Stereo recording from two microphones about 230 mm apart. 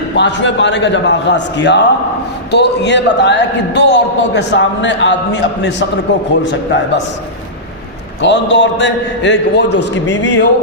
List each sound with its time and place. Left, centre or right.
0.2 s a man's voice: left
8.2 s a man's voice: left